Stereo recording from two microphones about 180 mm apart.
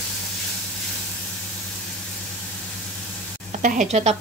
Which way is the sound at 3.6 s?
45° right (ahead or behind).